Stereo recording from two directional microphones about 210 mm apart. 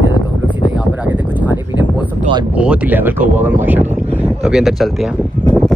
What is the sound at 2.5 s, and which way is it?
A man's voice, 5° right (ahead or behind).